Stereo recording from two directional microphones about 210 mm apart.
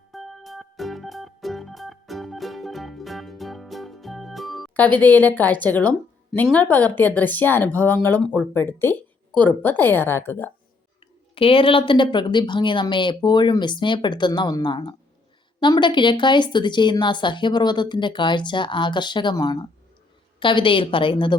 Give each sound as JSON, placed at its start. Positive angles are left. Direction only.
{"t": 0.1, "sound": "music", "side_deg": 0}
{"t": 9.4, "sound": "a woman's voice", "side_deg": 10}
{"t": 11.3, "sound": "speech", "side_deg": 25}